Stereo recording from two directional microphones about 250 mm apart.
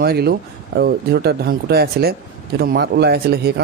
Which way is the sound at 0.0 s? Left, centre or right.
Right.